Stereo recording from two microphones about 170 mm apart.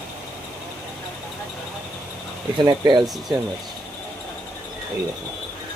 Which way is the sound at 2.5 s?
25° right (ahead or behind).